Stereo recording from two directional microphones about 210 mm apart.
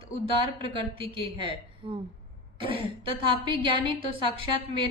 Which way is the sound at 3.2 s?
25° right (ahead or behind).